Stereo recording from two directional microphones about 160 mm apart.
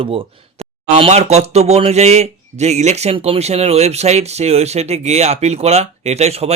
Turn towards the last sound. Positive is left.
turn(degrees=-40)  # may be behind; listen again after turning